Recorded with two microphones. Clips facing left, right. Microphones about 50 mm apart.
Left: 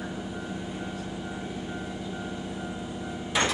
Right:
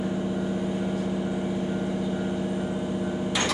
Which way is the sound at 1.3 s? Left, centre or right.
Centre.